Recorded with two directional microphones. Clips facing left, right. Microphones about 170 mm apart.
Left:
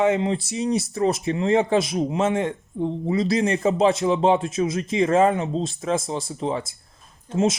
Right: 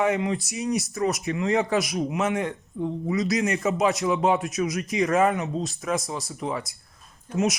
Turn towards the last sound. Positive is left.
turn(degrees=25)  # may be behind; listen again after turning